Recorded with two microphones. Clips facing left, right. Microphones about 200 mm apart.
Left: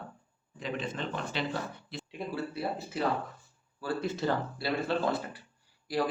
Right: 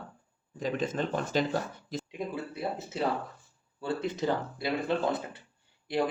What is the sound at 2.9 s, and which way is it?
Speech, 25° right (ahead or behind).